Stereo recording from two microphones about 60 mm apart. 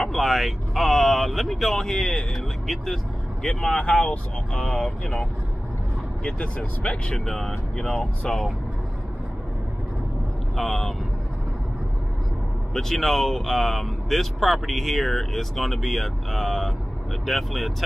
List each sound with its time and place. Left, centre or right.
0.1 s speech: centre
7.2 s speech: centre
10.5 s speech: centre
12.7 s speech: centre